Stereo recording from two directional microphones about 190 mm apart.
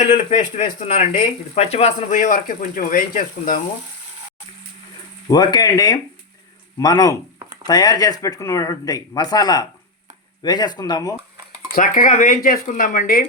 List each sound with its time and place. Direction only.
0.3 s speech: 35° left (ahead or behind)
5.3 s speech: 20° left (ahead or behind)
11.7 s speech: 45° left (ahead or behind)